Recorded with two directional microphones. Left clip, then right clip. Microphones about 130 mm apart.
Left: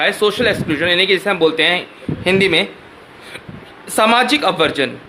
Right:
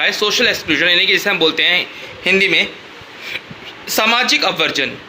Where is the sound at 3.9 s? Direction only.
30° left (ahead or behind).